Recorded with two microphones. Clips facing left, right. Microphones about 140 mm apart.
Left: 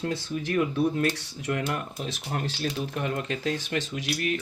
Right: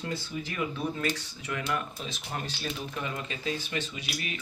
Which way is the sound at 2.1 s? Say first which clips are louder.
Left 5 dB; 75° left (ahead or behind).